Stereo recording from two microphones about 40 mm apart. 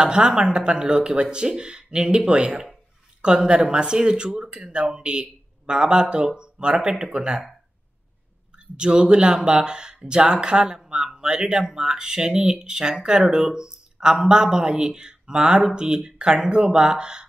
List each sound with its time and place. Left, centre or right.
0.0 s speech: right
8.7 s speech: right